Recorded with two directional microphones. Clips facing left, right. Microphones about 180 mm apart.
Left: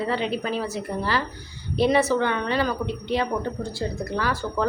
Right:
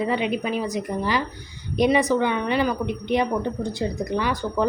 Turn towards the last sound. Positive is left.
turn(degrees=-15)  # may be behind; listen again after turning